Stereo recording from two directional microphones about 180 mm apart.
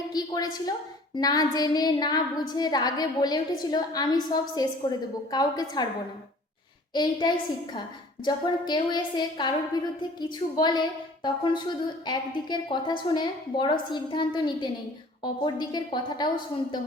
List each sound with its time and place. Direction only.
0.1 s a woman's voice: 20° left (ahead or behind)
6.9 s a woman's voice: 25° left (ahead or behind)